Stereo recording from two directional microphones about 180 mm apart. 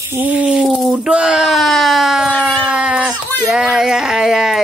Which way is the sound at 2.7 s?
5° right (ahead or behind).